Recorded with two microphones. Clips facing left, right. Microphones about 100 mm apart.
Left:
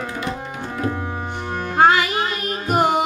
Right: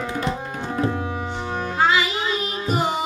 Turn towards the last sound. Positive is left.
turn(degrees=55)  # may be behind; listen again after turning